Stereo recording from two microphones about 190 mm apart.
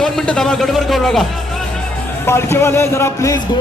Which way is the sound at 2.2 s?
15° left (ahead or behind).